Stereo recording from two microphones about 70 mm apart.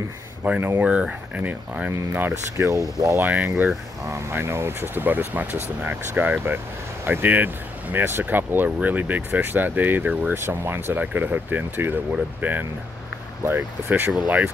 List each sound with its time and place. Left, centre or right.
0.4 s speech: right
2.5 s speech: right
3.2 s speech: right
14.1 s speech: centre